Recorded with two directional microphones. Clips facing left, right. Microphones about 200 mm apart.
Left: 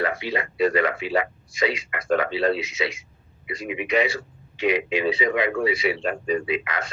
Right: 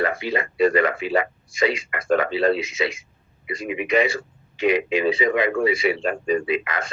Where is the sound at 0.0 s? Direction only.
50° right (ahead or behind).